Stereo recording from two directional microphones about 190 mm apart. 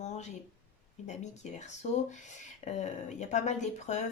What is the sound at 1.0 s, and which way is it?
Speech, 40° left (ahead or behind).